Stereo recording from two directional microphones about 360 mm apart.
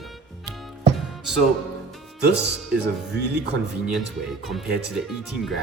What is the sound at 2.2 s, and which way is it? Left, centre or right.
Speech, right.